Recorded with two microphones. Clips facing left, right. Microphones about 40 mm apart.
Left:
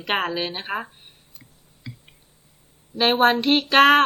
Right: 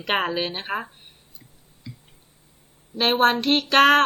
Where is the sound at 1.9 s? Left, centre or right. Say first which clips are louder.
Left 1 dB; left.